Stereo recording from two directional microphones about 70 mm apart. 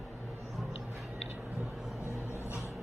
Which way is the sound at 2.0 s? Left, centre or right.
Left.